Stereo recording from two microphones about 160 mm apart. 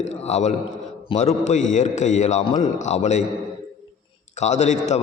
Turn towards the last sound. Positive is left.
turn(degrees=45)  # may be behind; listen again after turning